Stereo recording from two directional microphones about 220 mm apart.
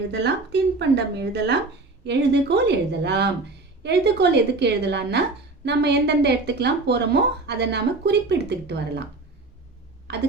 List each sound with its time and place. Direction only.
0.1 s a woman's voice: 50° right (ahead or behind)
10.1 s a woman's voice: 50° right (ahead or behind)